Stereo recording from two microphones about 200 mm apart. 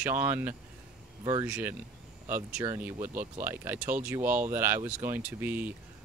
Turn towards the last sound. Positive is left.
turn(degrees=-10)  # may be behind; listen again after turning